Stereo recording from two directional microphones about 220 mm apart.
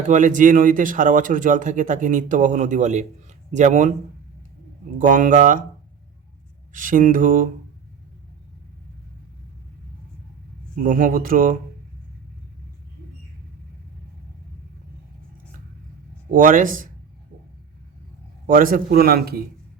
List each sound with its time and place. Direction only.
0.1 s speech: 35° right (ahead or behind)
4.9 s speech: 35° right (ahead or behind)
6.7 s speech: 35° right (ahead or behind)
10.8 s speech: 40° right (ahead or behind)
16.3 s speech: 35° right (ahead or behind)
18.4 s a man's voice: 40° right (ahead or behind)